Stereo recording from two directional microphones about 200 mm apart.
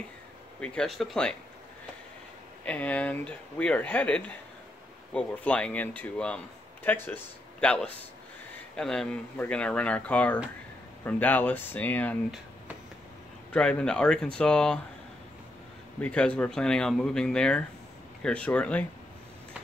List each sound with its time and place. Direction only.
0.6 s speech: centre (ahead or behind)
2.6 s speech: 5° left (ahead or behind)
13.5 s speech: 5° left (ahead or behind)
16.0 s speech: 5° left (ahead or behind)